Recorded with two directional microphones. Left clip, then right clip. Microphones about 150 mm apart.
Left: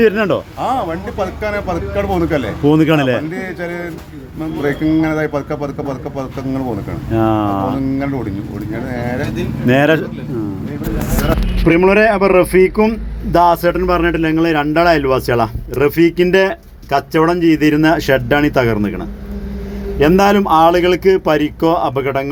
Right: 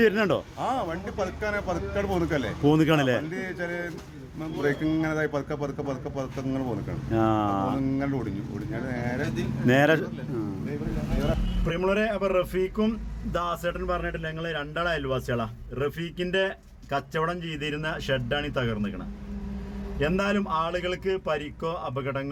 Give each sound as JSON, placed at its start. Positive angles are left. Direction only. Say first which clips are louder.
{"t": 0.0, "sound": "speech", "louder": "left 10 dB", "side_deg": -10}
{"t": 11.7, "sound": "a man's voice", "louder": "left 15 dB", "side_deg": 15}
{"t": 13.4, "sound": "a man's voice", "louder": "left 19 dB", "side_deg": 30}
{"t": 20.0, "sound": "a man's voice", "louder": "left 16 dB", "side_deg": 35}